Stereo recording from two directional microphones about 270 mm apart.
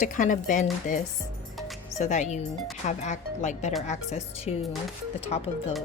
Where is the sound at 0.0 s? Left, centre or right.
Left.